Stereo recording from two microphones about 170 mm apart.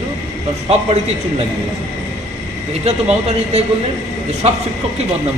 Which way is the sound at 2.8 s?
35° right (ahead or behind).